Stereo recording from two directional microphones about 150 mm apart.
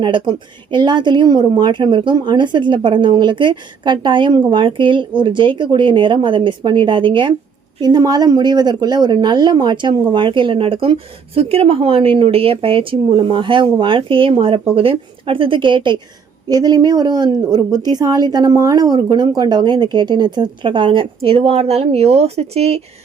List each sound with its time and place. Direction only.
0.0 s a woman's voice: 30° right (ahead or behind)